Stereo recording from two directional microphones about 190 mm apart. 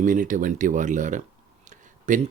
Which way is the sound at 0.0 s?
45° right (ahead or behind).